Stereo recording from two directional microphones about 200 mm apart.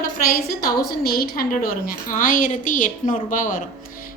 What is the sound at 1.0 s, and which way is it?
A woman's voice, 50° left (ahead or behind).